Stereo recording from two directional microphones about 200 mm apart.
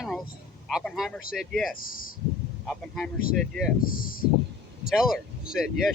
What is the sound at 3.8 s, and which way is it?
Speech, 45° left (ahead or behind).